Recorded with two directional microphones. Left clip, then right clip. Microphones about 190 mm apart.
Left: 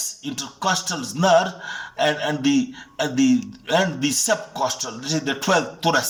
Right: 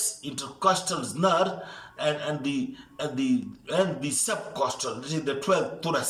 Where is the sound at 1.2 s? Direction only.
40° left (ahead or behind).